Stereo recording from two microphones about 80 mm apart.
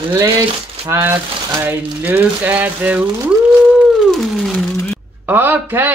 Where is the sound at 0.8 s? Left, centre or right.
Right; by 3.9 s centre.